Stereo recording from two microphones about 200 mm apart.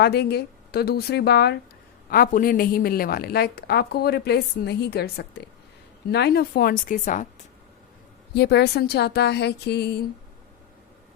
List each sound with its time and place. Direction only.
0.0 s a woman's voice: 55° left (ahead or behind)
8.4 s speech: 55° left (ahead or behind)